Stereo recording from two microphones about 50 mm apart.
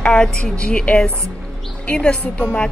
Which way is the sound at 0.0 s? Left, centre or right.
Centre.